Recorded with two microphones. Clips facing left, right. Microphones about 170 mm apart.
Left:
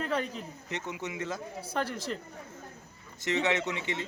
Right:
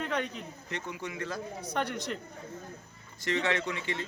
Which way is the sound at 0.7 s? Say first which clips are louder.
Left 1 dB; 20° left (ahead or behind).